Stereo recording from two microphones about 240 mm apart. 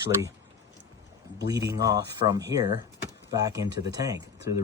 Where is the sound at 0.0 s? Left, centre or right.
Centre.